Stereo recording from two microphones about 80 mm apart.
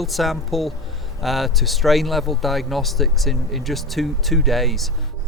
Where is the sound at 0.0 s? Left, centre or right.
Centre.